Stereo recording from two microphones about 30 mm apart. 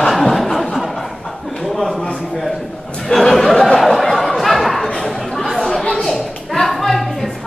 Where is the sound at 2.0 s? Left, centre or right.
Left.